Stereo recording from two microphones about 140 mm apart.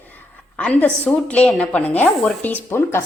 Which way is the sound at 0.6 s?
10° left (ahead or behind).